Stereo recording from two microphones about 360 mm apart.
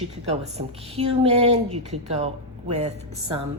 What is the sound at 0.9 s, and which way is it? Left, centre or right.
A woman's voice, centre.